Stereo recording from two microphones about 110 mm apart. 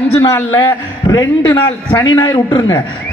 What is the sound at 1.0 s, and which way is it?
A man's voice, 40° left (ahead or behind).